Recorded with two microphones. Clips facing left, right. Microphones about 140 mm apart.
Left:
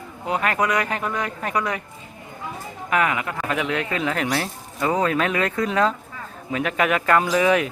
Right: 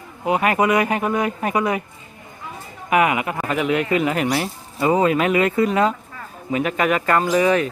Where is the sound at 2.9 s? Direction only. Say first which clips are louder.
Right 4 dB; 10° right (ahead or behind).